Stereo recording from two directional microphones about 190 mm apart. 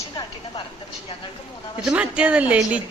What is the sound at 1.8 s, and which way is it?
Speech, 5° right (ahead or behind).